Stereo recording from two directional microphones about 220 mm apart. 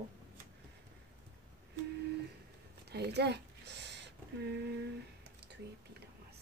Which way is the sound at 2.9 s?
50° right (ahead or behind).